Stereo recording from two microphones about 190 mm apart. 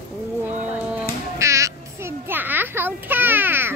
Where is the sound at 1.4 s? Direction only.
15° right (ahead or behind).